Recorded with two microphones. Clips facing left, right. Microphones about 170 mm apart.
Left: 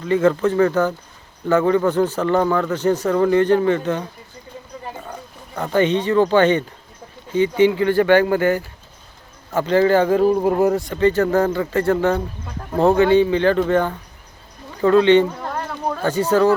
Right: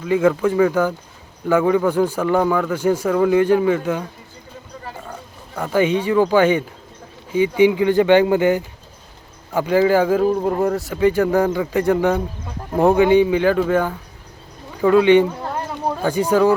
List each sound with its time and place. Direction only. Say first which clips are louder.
0.0 s speech: even; 10° right (ahead or behind)
5.7 s speech: even; 10° right (ahead or behind)
10.2 s speech: left 2 dB; 5° left (ahead or behind); by 16.6 s 10° right (ahead or behind)